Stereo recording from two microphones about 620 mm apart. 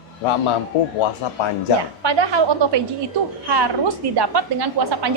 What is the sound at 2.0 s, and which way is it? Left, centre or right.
A woman's voice, right.